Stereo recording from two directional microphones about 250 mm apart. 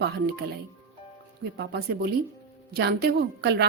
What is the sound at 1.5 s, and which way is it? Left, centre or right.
A woman's voice, right.